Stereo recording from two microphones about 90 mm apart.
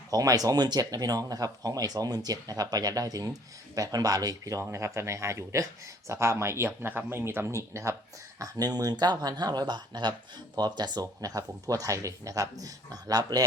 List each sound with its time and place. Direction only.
0.1 s speech: 40° right (ahead or behind)
8.4 s speech: 45° right (ahead or behind)